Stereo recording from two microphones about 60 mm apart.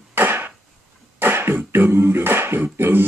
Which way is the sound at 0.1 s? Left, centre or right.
Right.